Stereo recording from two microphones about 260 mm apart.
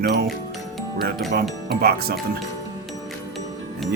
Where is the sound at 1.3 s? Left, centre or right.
Right.